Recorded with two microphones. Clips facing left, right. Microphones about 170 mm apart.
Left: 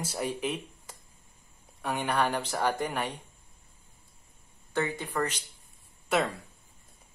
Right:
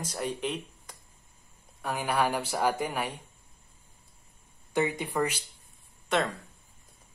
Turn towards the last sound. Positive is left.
turn(degrees=5)  # may be behind; listen again after turning